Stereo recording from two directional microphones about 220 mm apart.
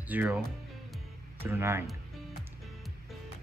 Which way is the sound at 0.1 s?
5° right (ahead or behind).